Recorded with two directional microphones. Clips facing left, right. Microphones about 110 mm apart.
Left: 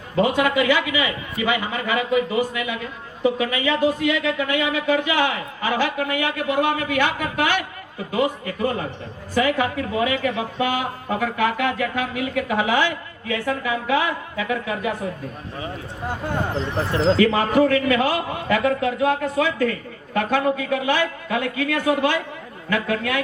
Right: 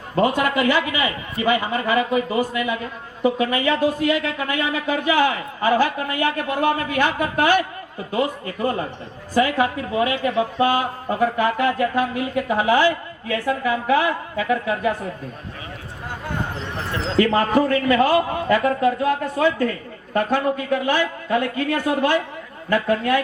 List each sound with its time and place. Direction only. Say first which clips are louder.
0.2 s speech: even; 40° right (ahead or behind)
17.2 s speech: right 4 dB; 40° right (ahead or behind)